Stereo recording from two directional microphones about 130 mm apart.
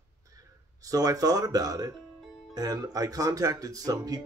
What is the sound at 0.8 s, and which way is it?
Speech, 25° right (ahead or behind).